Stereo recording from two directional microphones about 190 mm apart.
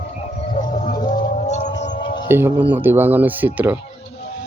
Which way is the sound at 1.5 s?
40° left (ahead or behind).